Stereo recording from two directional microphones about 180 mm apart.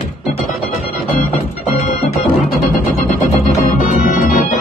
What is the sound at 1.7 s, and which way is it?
Organ, 40° left (ahead or behind).